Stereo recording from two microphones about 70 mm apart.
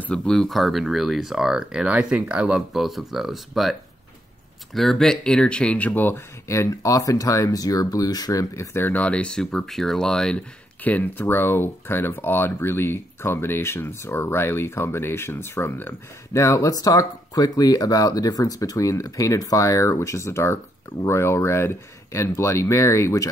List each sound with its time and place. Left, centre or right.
0.1 s speech: centre
2.7 s speech: centre
4.7 s speech: centre; by 8.6 s left
8.7 s speech: left; by 10.4 s centre
10.8 s speech: left
16.3 s speech: left